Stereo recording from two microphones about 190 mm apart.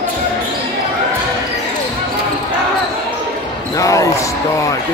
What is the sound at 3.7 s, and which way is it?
Basketball bounce, 15° left (ahead or behind).